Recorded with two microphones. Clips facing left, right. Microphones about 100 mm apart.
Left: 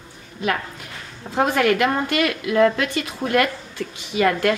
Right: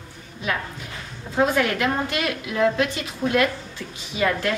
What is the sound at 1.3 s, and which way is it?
A woman's voice, 60° left (ahead or behind).